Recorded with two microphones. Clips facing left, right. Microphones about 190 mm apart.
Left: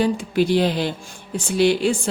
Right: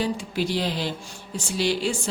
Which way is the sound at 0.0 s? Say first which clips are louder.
Left 7 dB; 55° left (ahead or behind).